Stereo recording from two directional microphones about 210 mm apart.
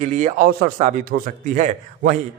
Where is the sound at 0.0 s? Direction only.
35° right (ahead or behind).